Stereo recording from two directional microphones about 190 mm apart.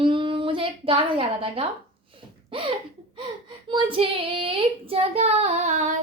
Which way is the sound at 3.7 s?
25° right (ahead or behind).